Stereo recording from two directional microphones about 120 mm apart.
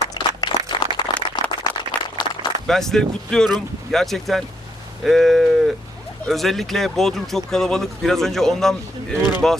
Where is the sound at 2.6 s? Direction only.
5° left (ahead or behind).